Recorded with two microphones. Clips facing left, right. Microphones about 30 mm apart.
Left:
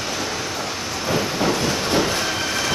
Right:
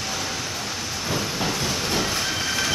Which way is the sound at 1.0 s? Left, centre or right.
Centre.